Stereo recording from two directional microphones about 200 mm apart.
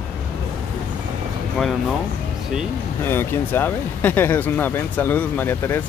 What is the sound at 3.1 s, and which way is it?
Speech, 10° left (ahead or behind).